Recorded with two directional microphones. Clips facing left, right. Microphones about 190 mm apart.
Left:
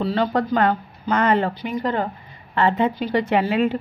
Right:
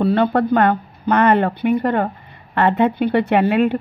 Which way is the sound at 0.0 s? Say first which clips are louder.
Right 5 dB; 60° right (ahead or behind).